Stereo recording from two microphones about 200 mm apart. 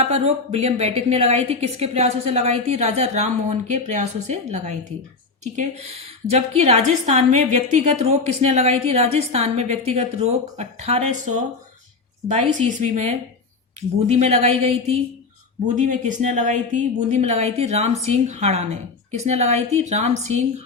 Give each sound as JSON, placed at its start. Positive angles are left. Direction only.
{"t": 0.0, "sound": "a woman's voice", "side_deg": -30}